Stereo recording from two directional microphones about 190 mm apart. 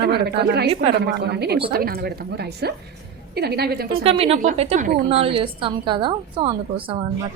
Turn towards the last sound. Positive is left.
turn(degrees=-30)  # may be behind; listen again after turning